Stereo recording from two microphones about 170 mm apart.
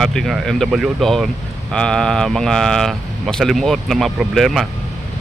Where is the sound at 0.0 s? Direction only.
Centre (ahead or behind).